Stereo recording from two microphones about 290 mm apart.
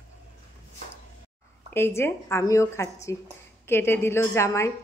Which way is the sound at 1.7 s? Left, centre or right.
Centre.